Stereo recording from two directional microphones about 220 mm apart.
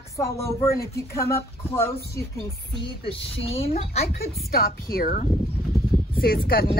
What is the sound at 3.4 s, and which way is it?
Speech, 25° left (ahead or behind).